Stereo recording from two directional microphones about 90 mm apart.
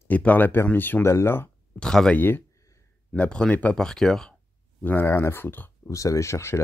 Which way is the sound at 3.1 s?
10° left (ahead or behind).